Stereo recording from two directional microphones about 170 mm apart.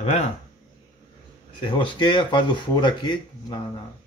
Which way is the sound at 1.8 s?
30° left (ahead or behind).